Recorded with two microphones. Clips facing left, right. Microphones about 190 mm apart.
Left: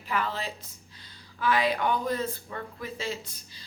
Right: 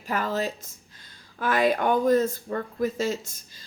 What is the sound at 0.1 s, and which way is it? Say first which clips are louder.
Speech: right 4 dB; 45° right (ahead or behind).